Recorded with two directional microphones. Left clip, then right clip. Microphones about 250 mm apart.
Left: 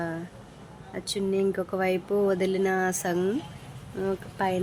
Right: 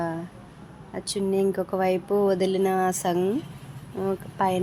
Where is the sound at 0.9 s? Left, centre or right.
Centre.